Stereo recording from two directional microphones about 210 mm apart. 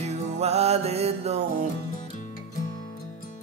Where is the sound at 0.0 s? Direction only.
30° right (ahead or behind).